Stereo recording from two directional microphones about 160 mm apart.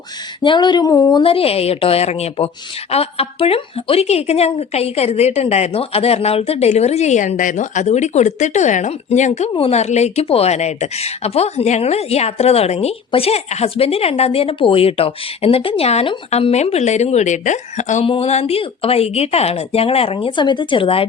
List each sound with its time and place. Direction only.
0.4 s speech: 30° left (ahead or behind)
1.2 s a woman's voice: 35° left (ahead or behind)